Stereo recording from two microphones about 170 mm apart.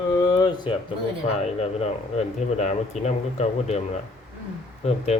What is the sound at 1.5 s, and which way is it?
Speech, 40° left (ahead or behind).